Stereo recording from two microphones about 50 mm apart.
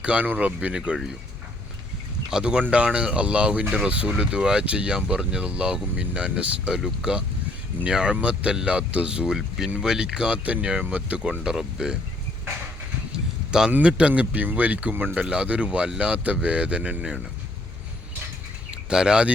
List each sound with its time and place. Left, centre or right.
0.0 s speech: right
2.3 s speech: centre
11.4 s speech: centre
13.5 s speech: centre
14.1 s speech: right
15.2 s speech: right
18.7 s speech: centre